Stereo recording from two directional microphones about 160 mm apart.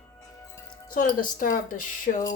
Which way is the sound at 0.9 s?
55° left (ahead or behind).